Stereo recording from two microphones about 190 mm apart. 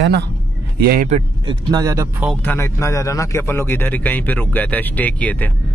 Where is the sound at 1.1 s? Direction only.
25° right (ahead or behind).